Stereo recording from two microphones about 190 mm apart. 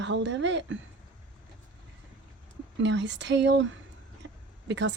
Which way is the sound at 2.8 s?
70° right (ahead or behind).